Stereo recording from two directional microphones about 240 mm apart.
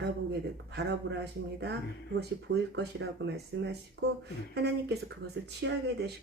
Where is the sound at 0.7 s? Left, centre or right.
Right.